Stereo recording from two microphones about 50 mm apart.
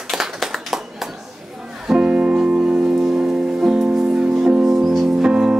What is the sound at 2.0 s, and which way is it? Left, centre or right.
Music, right.